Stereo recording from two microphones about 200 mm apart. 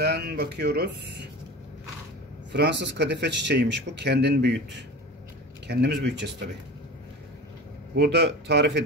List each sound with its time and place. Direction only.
0.0 s speech: 55° right (ahead or behind)
2.5 s speech: 60° right (ahead or behind)
5.7 s speech: 55° right (ahead or behind)
7.9 s speech: 55° right (ahead or behind)